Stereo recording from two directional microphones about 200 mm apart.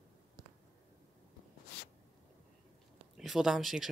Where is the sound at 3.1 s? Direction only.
Centre (ahead or behind).